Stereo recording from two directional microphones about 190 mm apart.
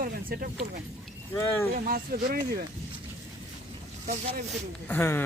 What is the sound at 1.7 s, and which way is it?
Speech, 50° right (ahead or behind).